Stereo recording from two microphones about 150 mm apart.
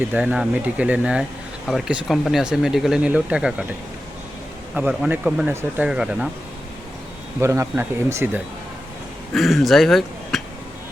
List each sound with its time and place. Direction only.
0.1 s speech: 10° right (ahead or behind)
4.7 s speech: 10° right (ahead or behind)
7.3 s speech: 20° right (ahead or behind)
9.3 s speech: centre (ahead or behind)